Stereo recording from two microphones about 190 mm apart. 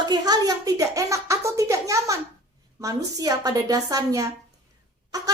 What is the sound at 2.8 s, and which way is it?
A woman's voice, 20° right (ahead or behind).